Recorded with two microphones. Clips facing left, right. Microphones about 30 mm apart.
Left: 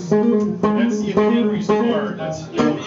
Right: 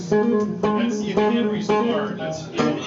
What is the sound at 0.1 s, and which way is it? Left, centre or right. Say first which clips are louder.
Speech: left 3 dB; centre.